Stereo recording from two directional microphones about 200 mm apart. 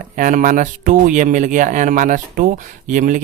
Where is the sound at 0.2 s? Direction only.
40° right (ahead or behind).